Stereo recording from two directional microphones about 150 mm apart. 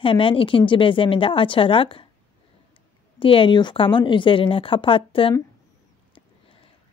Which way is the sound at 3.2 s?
35° left (ahead or behind).